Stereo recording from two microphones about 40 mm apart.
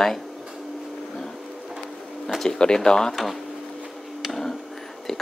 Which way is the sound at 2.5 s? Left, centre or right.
Centre.